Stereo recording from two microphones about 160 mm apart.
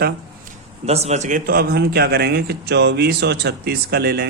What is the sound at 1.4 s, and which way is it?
Speech, 75° right (ahead or behind).